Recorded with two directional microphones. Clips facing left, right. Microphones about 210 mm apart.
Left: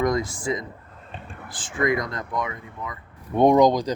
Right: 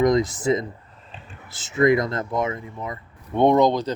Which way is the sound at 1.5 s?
25° right (ahead or behind).